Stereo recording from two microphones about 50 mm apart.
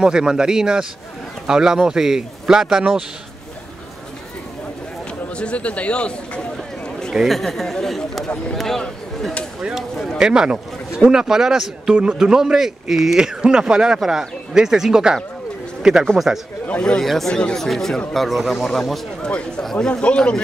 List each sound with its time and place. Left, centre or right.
0.0 s speech: centre
5.3 s a sound: left
7.2 s speech: centre
9.6 s speech: centre
11.9 s speech: right
17.0 s speech: centre
17.3 s speech: centre
17.6 s speech: centre
18.7 s speech: centre
19.2 s a man's voice: centre
19.6 s speech: centre
19.9 s a man's voice: left